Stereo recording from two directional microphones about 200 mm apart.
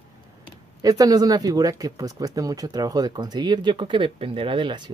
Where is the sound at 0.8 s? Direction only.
20° right (ahead or behind).